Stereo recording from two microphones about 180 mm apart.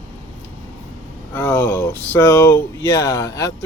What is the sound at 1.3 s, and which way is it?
Speech, 10° left (ahead or behind).